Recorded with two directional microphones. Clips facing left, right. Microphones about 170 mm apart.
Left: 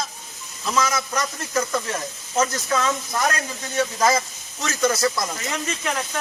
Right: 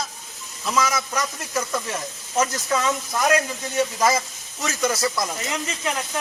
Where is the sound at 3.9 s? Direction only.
5° right (ahead or behind).